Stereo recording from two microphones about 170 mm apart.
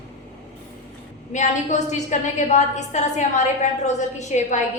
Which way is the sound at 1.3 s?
45° left (ahead or behind).